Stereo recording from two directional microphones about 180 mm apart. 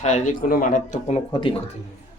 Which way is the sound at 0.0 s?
45° left (ahead or behind).